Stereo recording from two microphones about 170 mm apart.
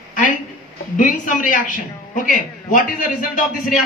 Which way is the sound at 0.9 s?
50° left (ahead or behind).